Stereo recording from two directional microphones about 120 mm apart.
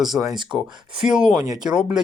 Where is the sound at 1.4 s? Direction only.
35° right (ahead or behind).